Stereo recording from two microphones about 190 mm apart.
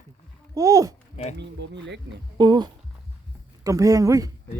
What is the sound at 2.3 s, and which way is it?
Speech, 20° right (ahead or behind).